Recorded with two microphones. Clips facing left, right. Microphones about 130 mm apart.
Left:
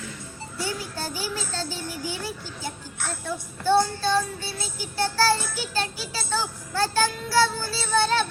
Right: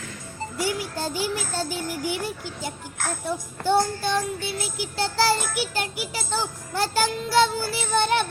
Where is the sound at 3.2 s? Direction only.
15° right (ahead or behind).